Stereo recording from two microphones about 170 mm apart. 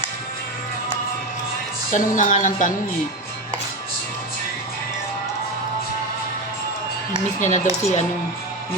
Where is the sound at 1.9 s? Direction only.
45° left (ahead or behind).